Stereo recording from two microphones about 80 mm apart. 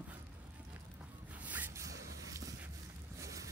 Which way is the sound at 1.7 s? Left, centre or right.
Right.